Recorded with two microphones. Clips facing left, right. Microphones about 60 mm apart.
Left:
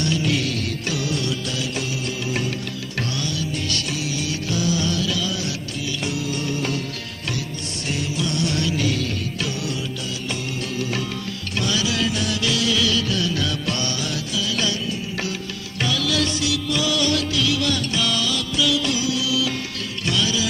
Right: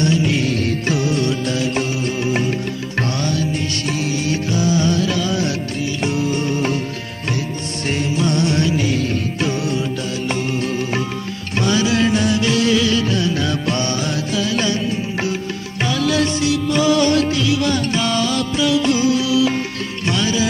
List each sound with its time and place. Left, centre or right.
0.0 s music: right
4.0 s music: right
7.9 s music: right